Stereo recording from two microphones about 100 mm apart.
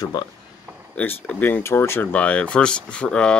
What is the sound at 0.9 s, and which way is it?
Speech, 20° left (ahead or behind).